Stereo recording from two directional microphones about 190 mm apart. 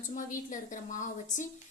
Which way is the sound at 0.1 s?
45° left (ahead or behind).